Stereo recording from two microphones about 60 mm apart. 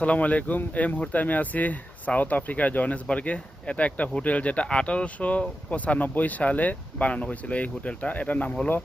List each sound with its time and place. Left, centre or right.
0.0 s speech: left